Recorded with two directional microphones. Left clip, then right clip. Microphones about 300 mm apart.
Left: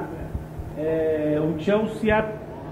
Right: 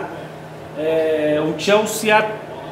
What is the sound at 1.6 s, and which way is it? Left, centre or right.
Speech, centre.